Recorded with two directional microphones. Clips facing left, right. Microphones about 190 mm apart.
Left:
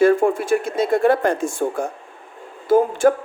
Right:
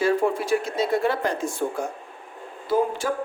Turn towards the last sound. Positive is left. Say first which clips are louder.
# left 8 dB
turn(degrees=50)  # may be behind; listen again after turning